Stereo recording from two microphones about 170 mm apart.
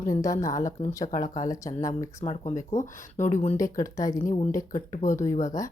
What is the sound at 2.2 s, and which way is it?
Speech, 40° left (ahead or behind).